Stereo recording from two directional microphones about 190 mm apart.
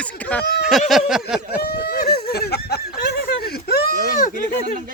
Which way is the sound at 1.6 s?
55° left (ahead or behind).